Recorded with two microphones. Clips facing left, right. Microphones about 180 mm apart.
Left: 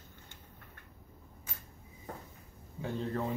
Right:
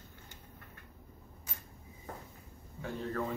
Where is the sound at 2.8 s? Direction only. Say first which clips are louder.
Left 2 dB; 20° left (ahead or behind).